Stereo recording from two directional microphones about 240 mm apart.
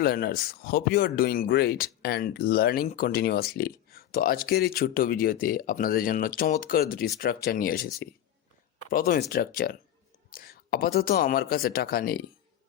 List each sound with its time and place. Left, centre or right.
0.0 s speech: left
8.9 s speech: left